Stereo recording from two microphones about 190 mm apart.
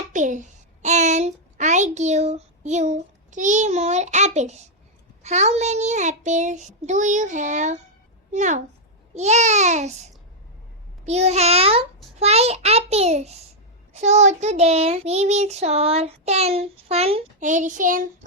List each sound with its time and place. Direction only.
0.1 s a child's voice: 40° right (ahead or behind)
5.2 s child singing: 35° right (ahead or behind)